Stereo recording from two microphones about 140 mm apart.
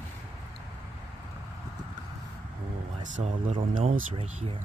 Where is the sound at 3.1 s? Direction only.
65° right (ahead or behind).